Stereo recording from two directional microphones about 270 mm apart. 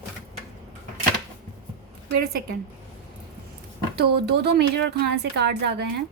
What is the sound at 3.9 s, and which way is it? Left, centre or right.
A woman's voice, right.